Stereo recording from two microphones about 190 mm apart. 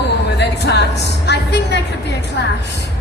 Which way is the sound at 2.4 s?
65° left (ahead or behind).